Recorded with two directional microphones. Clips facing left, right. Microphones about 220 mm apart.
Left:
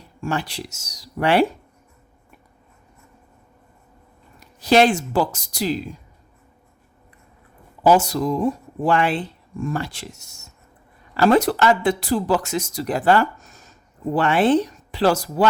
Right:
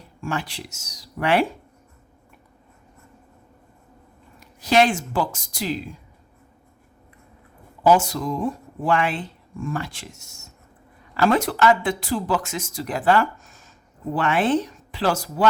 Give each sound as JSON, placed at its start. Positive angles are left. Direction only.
{"t": 0.2, "sound": "speech", "side_deg": 35}
{"t": 4.6, "sound": "speech", "side_deg": 35}
{"t": 7.9, "sound": "speech", "side_deg": 35}